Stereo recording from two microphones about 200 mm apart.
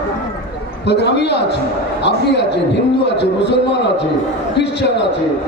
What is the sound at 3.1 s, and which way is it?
Speech, 60° left (ahead or behind).